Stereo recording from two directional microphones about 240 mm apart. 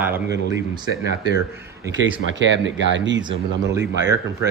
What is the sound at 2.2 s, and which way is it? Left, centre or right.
Speech, right.